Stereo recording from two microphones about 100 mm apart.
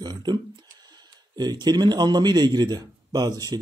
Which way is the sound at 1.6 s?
45° right (ahead or behind).